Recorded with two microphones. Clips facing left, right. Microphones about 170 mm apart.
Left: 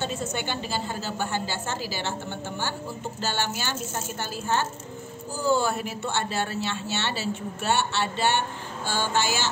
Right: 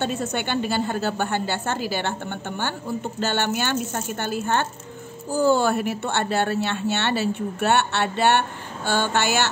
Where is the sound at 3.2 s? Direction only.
60° right (ahead or behind).